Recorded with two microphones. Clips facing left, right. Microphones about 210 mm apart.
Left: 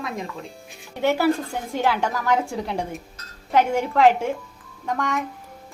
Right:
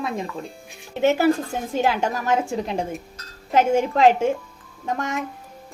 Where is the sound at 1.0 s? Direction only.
20° right (ahead or behind).